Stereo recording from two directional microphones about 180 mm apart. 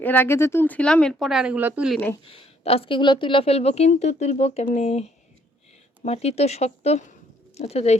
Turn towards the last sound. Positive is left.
turn(degrees=35)  # may be behind; listen again after turning